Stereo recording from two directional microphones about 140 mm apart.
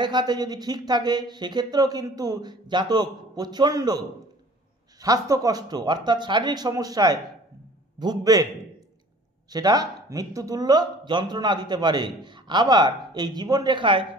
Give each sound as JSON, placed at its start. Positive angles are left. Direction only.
{"t": 0.0, "sound": "speech", "side_deg": -30}
{"t": 5.0, "sound": "speech", "side_deg": -25}
{"t": 9.5, "sound": "speech", "side_deg": -25}